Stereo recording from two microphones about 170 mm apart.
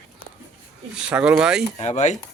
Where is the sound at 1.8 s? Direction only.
40° left (ahead or behind).